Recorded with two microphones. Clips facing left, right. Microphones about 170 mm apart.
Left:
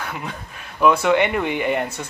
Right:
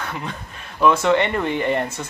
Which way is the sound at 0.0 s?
5° left (ahead or behind).